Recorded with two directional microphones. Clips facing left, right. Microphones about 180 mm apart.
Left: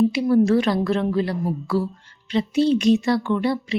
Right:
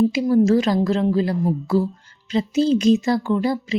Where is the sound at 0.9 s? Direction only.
25° right (ahead or behind).